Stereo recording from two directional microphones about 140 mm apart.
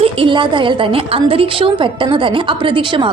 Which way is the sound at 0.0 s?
40° right (ahead or behind).